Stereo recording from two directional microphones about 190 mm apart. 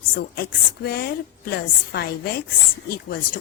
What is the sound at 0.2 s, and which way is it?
A woman's voice, 55° left (ahead or behind).